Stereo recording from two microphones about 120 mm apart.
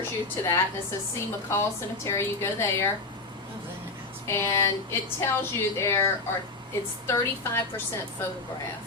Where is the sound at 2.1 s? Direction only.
20° left (ahead or behind).